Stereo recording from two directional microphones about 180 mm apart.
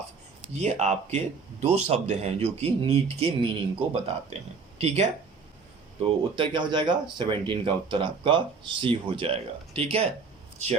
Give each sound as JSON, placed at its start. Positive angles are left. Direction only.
{"t": 0.4, "sound": "speech", "side_deg": -40}